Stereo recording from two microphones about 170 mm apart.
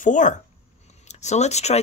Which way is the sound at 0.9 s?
40° left (ahead or behind).